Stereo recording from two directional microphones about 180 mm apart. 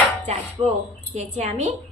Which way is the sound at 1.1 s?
40° right (ahead or behind).